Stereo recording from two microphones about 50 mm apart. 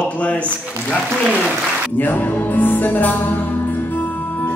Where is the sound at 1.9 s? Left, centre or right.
Left.